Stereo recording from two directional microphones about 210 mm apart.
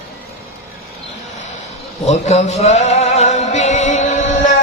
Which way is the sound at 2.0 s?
30° left (ahead or behind).